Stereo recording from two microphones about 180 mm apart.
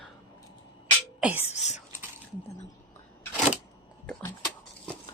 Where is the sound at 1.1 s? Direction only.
5° right (ahead or behind).